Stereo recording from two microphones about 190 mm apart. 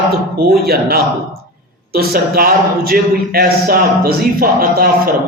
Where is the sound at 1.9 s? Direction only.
50° right (ahead or behind).